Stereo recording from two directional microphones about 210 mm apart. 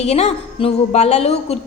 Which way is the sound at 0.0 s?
30° left (ahead or behind).